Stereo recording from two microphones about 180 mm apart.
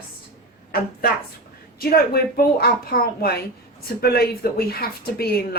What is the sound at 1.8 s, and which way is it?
Speech, 60° left (ahead or behind).